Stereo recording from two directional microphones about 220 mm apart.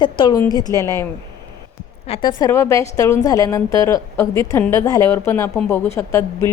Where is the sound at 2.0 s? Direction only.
25° left (ahead or behind).